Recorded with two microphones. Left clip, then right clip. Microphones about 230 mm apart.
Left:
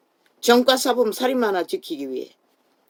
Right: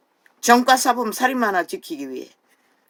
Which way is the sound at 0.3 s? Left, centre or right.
Right.